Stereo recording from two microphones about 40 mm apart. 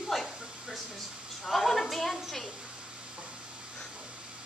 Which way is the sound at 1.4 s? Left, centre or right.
Centre.